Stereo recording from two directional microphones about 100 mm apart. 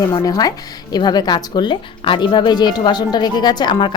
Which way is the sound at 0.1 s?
40° left (ahead or behind).